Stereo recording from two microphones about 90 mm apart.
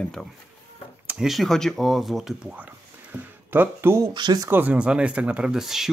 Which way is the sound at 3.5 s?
25° right (ahead or behind).